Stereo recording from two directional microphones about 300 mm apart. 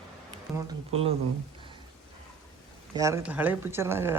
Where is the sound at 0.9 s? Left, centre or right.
Centre.